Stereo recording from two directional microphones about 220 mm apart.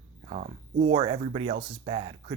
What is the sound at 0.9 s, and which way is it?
Speech, 20° right (ahead or behind).